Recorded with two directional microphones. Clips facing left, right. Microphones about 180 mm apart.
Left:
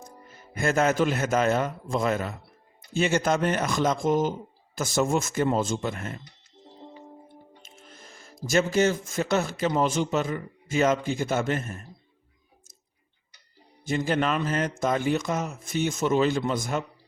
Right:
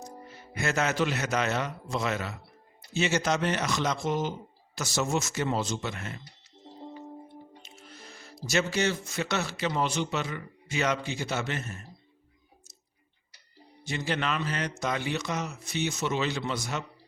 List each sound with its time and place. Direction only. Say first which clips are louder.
0.6 s speech: left 5 dB; 50° left (ahead or behind)
7.6 s speech: right 1 dB; 45° left (ahead or behind)
13.8 s speech: left 6 dB; 45° left (ahead or behind)